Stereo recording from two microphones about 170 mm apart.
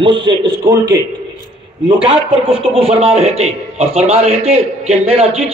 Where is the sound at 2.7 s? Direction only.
35° right (ahead or behind).